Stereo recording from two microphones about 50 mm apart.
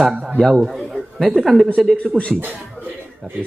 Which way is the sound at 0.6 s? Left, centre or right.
Centre.